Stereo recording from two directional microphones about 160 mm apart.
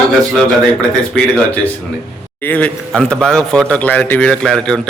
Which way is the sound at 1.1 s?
5° left (ahead or behind).